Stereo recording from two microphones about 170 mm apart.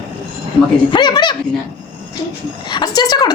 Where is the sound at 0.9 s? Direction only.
25° left (ahead or behind).